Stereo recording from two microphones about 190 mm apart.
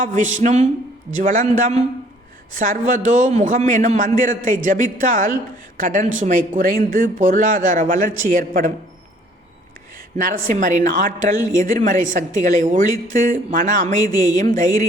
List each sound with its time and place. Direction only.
0.0 s a man's voice: 40° right (ahead or behind)
10.2 s a man's voice: 50° right (ahead or behind)
14.0 s a woman's voice: 20° left (ahead or behind)
14.4 s a man's voice: 40° right (ahead or behind)